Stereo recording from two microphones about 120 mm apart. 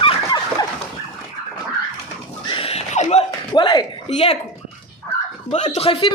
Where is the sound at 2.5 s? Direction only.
55° left (ahead or behind); by 3.3 s 75° left (ahead or behind).